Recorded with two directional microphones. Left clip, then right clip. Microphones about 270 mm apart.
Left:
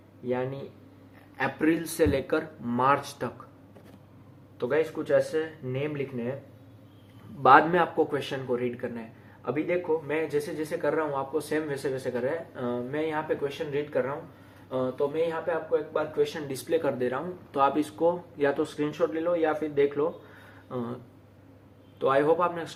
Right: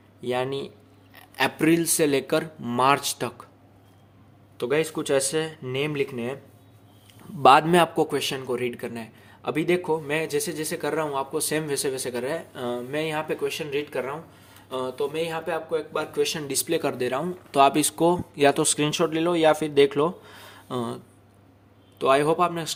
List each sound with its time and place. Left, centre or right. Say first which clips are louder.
0.3 s a man's voice: right 4 dB; right
4.5 s a man's voice: right 2 dB; right
7.4 s a man's voice: right 3 dB; right